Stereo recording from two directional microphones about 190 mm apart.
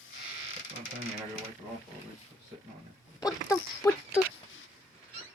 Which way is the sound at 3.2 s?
20° left (ahead or behind).